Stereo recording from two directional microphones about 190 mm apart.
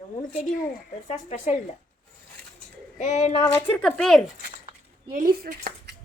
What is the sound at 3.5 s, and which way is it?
Speech, 10° left (ahead or behind).